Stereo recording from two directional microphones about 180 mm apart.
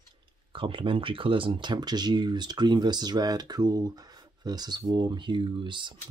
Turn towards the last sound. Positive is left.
turn(degrees=-25)  # may be behind; listen again after turning